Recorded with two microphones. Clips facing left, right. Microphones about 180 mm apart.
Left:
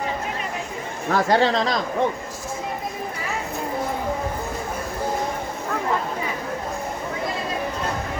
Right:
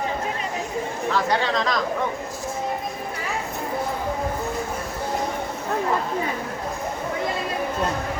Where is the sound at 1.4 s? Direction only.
30° left (ahead or behind).